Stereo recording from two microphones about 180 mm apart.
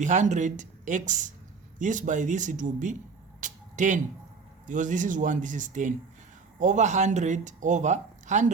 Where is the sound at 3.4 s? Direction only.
45° right (ahead or behind).